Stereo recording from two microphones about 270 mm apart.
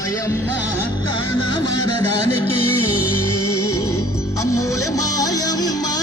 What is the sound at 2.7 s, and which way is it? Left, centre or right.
Music, left.